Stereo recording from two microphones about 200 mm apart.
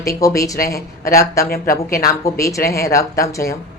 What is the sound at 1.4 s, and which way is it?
Speech, 45° left (ahead or behind).